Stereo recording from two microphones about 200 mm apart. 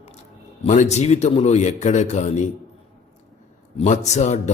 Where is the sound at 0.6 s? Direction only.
35° left (ahead or behind).